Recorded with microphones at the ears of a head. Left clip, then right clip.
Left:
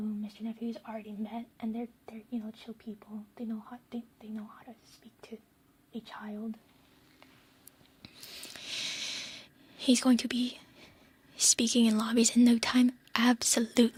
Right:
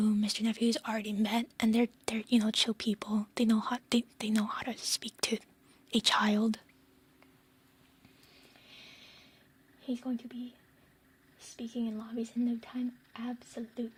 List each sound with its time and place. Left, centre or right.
0.0 s a woman's voice: right
8.0 s a sound: left
11.3 s speech: left